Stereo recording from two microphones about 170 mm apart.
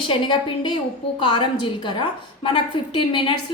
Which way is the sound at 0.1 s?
30° left (ahead or behind).